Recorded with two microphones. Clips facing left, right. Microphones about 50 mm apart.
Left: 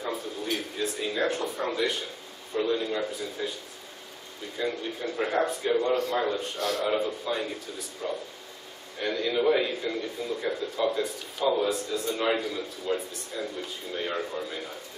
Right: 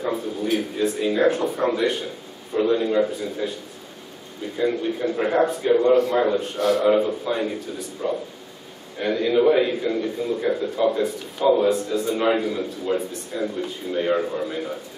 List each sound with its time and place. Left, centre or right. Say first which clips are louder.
0.0 s a sound: right 7 dB; centre
1.6 s a man's voice: right 5 dB; centre
4.6 s a man's voice: right 8 dB; centre